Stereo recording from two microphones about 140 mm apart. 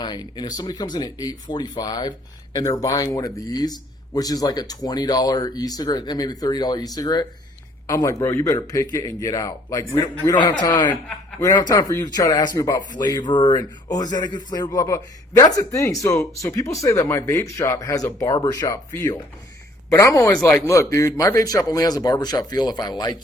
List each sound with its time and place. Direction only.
0.0 s speech: 30° left (ahead or behind)